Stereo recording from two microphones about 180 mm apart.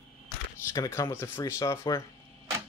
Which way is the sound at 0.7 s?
20° left (ahead or behind).